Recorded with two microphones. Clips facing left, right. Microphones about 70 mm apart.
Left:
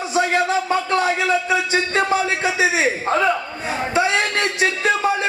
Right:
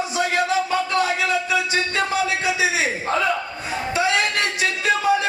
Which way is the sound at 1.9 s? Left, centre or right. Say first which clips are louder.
Left 4 dB; left.